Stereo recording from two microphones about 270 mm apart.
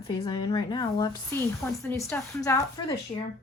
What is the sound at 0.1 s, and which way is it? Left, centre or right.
Speech, centre.